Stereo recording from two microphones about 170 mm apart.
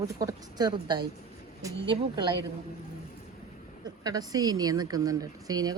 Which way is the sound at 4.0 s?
20° right (ahead or behind).